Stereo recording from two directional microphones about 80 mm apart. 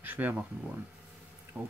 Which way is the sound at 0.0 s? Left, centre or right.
Right.